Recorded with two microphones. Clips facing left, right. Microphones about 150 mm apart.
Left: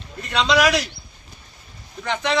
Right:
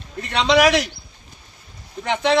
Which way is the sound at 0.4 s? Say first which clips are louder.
Right 3 dB; 20° right (ahead or behind).